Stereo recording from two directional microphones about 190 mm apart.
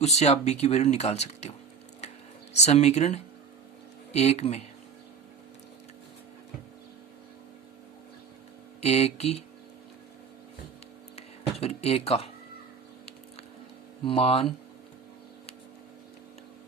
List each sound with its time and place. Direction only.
0.0 s speech: 35° left (ahead or behind)
8.8 s speech: 35° left (ahead or behind)
11.6 s speech: 30° left (ahead or behind)
14.0 s speech: 30° left (ahead or behind)